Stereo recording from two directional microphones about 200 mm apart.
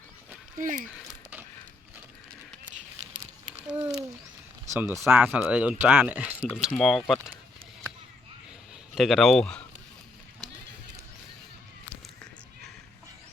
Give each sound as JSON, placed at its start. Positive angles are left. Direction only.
{"t": 0.6, "sound": "speech", "side_deg": -40}
{"t": 0.9, "sound": "a sound", "side_deg": -5}
{"t": 3.8, "sound": "speech", "side_deg": -10}
{"t": 9.0, "sound": "speech", "side_deg": 0}